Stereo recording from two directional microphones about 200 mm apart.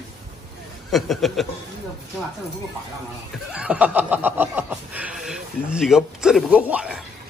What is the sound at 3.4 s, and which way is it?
Speech, 5° right (ahead or behind).